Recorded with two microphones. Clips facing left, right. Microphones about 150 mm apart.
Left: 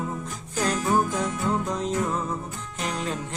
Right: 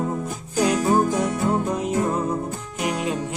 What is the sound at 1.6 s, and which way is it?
Music, 10° right (ahead or behind).